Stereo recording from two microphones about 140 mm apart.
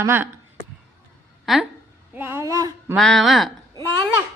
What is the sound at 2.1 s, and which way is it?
Speech, 15° right (ahead or behind).